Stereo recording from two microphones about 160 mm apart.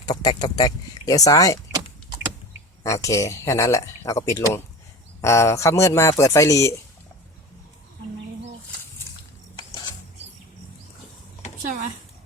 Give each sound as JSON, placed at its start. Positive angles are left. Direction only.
{"t": 0.0, "sound": "speech", "side_deg": 25}
{"t": 2.8, "sound": "speech", "side_deg": 20}
{"t": 11.6, "sound": "a sound", "side_deg": -50}